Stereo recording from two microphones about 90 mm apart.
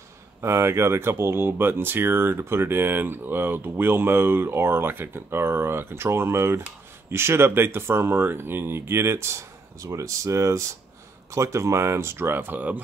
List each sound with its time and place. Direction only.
0.4 s speech: 30° right (ahead or behind)